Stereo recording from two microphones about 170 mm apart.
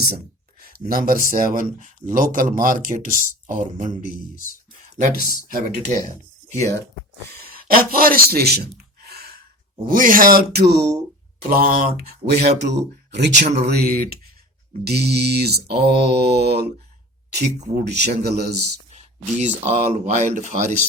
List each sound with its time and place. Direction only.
0.9 s speech: 60° right (ahead or behind)
5.1 s speech: 55° left (ahead or behind)
5.5 s speech: 55° right (ahead or behind)
6.6 s speech: 15° left (ahead or behind)
7.5 s a man's voice: 60° right (ahead or behind)
9.8 s speech: 55° right (ahead or behind); by 10.8 s 70° right (ahead or behind)
11.4 s speech: 60° right (ahead or behind)
12.5 s speech: 85° right
13.7 s mantra: 65° right (ahead or behind)
17.7 s mantra: 80° right
18.9 s speech: 40° right (ahead or behind)